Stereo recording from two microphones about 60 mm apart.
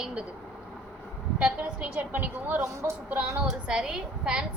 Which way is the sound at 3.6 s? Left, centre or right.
Centre.